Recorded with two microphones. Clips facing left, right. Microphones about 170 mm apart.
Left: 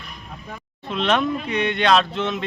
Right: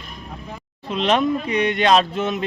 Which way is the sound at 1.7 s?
40° right (ahead or behind).